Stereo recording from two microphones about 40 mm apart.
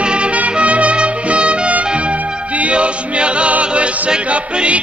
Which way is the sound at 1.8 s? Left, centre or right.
Right.